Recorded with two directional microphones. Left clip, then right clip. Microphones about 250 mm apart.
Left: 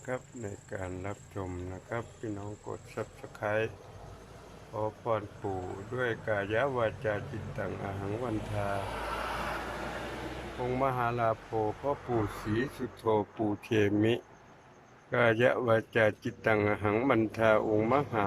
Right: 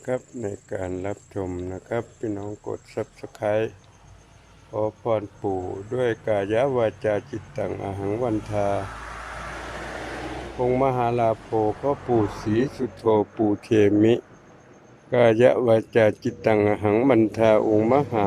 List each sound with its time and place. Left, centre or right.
0.0 s speech: right
4.7 s speech: centre
10.6 s speech: right